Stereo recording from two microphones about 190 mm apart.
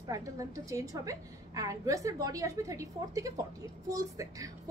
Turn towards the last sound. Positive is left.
turn(degrees=-15)  # may be behind; listen again after turning